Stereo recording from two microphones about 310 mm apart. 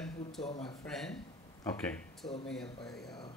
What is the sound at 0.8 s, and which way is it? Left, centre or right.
Speech, centre.